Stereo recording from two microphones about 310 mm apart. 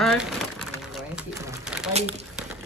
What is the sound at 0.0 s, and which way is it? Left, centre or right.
Pigeon, centre.